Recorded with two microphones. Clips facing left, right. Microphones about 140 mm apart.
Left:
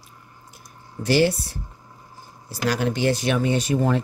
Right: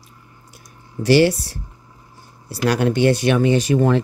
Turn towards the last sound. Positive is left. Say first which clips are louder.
# right 5 dB
turn(degrees=-90)